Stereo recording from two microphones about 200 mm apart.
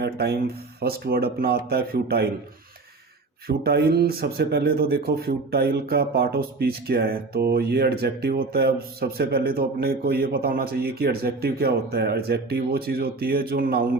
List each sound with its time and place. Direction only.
0.0 s speech: 55° right (ahead or behind)
3.4 s speech: 50° right (ahead or behind)